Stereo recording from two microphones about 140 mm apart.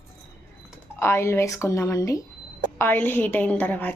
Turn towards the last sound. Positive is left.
turn(degrees=10)  # may be behind; listen again after turning